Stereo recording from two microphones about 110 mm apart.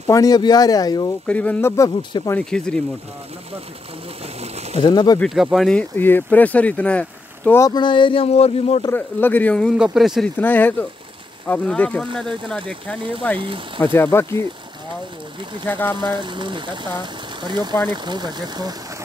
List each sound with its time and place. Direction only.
0.0 s speech: 30° left (ahead or behind)
1.2 s speech: 10° left (ahead or behind)
4.4 s a sound: 75° right (ahead or behind)
4.9 s speech: 40° left (ahead or behind)
5.2 s speech: centre (ahead or behind)
5.8 s speech: 20° left (ahead or behind)
7.7 s speech: 45° left (ahead or behind); by 8.8 s 65° left (ahead or behind)
8.9 s speech: 15° left (ahead or behind)
9.9 s speech: centre (ahead or behind)
10.2 s speech: 15° left (ahead or behind)
15.6 s speech: 15° left (ahead or behind)
16.1 s speech: 45° right (ahead or behind)